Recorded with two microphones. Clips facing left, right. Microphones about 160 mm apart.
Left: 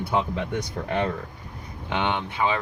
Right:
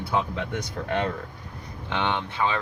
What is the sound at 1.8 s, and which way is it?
Speech, 15° left (ahead or behind).